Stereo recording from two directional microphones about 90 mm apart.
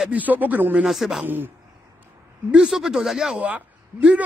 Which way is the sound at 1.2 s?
20° right (ahead or behind).